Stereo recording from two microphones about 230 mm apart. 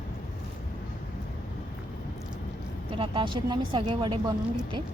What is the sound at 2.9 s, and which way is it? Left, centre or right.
Speech, right.